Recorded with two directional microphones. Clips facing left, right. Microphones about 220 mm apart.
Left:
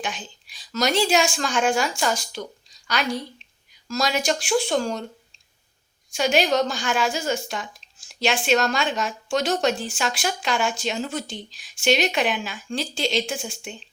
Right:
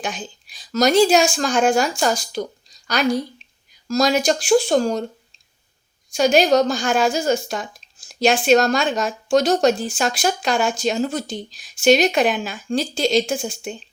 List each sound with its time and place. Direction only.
0.0 s speech: 40° right (ahead or behind)
6.1 s speech: 40° right (ahead or behind)